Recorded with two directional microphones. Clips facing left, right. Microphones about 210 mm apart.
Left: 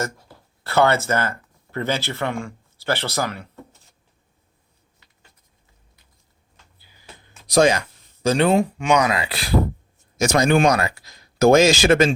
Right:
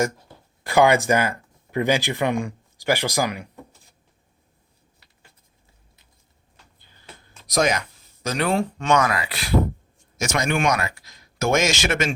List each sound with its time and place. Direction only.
0.6 s speech: 15° right (ahead or behind)
6.7 s music: 10° left (ahead or behind)
7.4 s speech: 30° left (ahead or behind)
8.6 s speech: 15° left (ahead or behind); by 12.1 s 35° left (ahead or behind)